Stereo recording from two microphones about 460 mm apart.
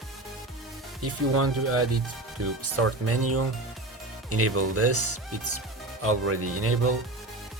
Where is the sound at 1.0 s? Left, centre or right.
Right.